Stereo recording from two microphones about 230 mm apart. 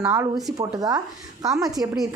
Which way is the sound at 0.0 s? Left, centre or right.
Centre.